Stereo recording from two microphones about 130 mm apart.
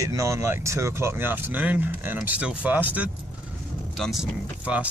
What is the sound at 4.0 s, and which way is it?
Speech, centre (ahead or behind).